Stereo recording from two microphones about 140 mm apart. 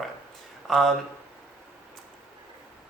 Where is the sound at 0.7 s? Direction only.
Centre (ahead or behind).